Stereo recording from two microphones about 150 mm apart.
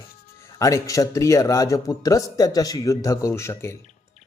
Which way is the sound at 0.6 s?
20° left (ahead or behind).